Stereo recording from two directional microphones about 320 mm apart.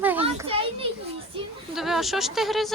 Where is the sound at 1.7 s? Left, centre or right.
Centre.